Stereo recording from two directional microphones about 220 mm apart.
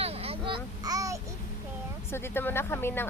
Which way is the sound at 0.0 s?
25° right (ahead or behind).